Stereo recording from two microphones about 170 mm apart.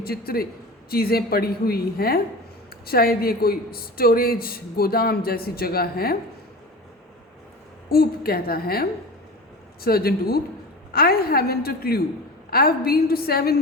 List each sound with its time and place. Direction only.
0.0 s speech: 60° left (ahead or behind)
7.9 s speech: 60° left (ahead or behind)